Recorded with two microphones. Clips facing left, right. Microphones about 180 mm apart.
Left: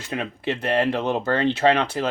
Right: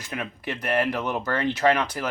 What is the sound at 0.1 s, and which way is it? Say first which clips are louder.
Speech: left 5 dB; 25° left (ahead or behind).